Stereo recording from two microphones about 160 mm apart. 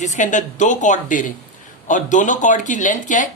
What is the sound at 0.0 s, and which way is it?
A woman's voice, 50° left (ahead or behind).